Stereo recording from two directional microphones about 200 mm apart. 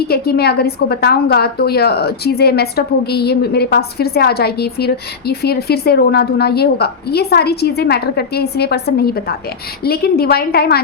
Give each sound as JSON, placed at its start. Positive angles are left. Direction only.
{"t": 0.1, "sound": "a woman's voice", "side_deg": 50}